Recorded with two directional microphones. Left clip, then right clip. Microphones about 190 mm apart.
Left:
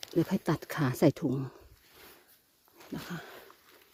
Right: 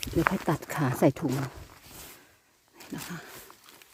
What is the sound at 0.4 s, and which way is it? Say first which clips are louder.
Speech: right 3 dB; 10° right (ahead or behind).